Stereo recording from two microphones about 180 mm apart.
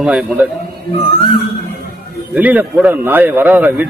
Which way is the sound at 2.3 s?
10° right (ahead or behind).